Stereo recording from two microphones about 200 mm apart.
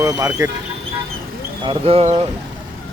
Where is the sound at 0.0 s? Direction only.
20° right (ahead or behind).